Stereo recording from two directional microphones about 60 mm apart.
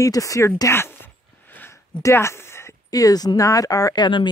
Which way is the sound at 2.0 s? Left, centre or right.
Left.